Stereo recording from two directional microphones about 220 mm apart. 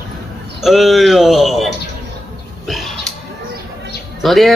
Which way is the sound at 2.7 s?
Centre (ahead or behind).